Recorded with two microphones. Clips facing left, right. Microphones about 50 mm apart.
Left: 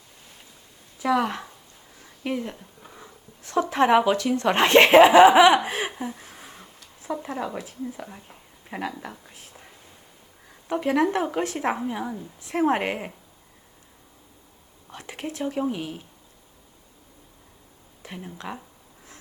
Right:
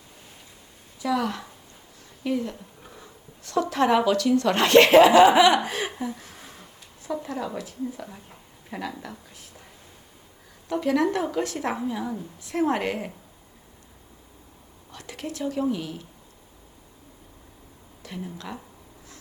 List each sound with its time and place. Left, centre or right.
1.0 s a woman's voice: left
2.8 s a woman's voice: centre
6.2 s a sound: centre
8.0 s speech: centre
8.7 s a woman's voice: left
10.7 s a woman's voice: left
14.9 s a woman's voice: left
18.0 s speech: left